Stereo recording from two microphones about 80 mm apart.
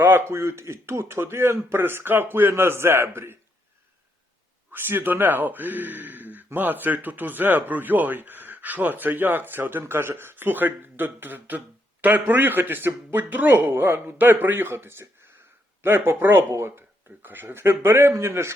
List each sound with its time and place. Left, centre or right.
0.0 s speech: right
4.7 s speech: right